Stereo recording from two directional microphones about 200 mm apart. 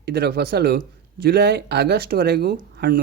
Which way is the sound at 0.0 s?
55° right (ahead or behind).